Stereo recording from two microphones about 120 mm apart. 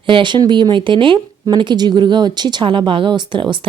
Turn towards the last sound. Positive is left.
turn(degrees=-40)  # may be behind; listen again after turning